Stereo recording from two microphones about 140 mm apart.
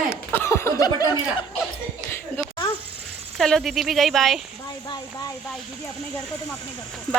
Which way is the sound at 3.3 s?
Centre (ahead or behind).